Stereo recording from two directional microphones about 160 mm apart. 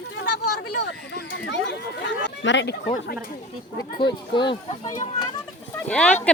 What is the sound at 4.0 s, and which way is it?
Speech, 30° left (ahead or behind).